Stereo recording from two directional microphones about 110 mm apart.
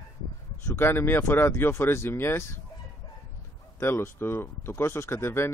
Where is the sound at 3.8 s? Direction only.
20° left (ahead or behind).